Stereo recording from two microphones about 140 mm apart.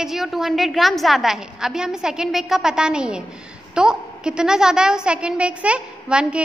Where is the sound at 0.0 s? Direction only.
Centre (ahead or behind).